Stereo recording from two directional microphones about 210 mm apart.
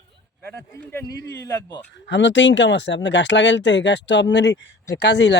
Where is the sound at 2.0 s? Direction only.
60° left (ahead or behind).